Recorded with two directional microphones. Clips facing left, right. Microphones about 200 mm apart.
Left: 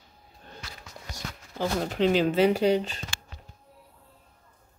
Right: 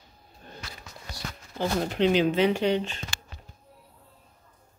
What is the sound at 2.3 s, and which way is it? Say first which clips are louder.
Speech: left 2 dB; 40° left (ahead or behind).